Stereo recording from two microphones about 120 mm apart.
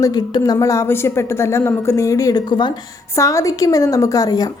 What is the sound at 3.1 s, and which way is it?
A woman's voice, 25° left (ahead or behind).